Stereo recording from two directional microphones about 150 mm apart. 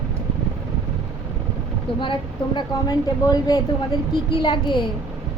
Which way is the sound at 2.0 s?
30° left (ahead or behind).